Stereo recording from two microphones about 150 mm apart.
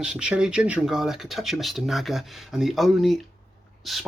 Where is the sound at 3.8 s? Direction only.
Centre (ahead or behind).